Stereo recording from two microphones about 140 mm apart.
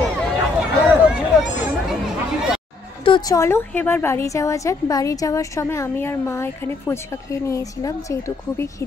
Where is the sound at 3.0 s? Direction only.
35° left (ahead or behind).